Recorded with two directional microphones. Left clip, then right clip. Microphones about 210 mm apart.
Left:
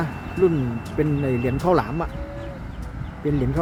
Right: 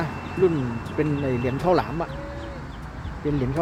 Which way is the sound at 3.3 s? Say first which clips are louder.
Left 2 dB; 15° left (ahead or behind).